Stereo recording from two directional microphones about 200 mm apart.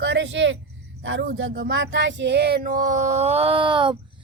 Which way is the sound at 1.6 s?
70° right (ahead or behind).